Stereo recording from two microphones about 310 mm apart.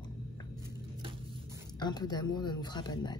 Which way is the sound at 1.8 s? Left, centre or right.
Centre.